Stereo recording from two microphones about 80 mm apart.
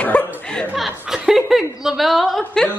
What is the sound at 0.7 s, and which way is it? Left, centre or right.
A woman's voice, centre.